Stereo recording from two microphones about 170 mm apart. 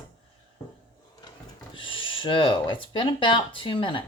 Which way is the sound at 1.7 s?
30° left (ahead or behind).